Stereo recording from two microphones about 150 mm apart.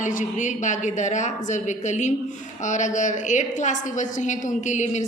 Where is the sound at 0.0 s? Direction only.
55° left (ahead or behind).